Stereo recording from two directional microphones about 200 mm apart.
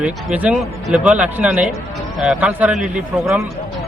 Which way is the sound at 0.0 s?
5° right (ahead or behind).